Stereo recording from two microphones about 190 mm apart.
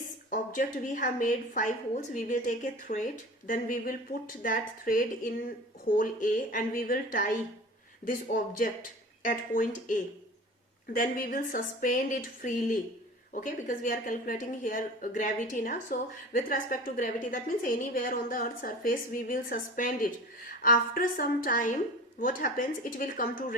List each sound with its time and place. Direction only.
0.3 s a woman's voice: 45° left (ahead or behind)